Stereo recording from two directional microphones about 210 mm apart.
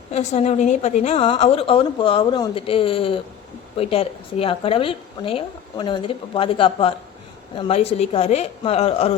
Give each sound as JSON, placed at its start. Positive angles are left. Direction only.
{"t": 0.1, "sound": "a woman's voice", "side_deg": 30}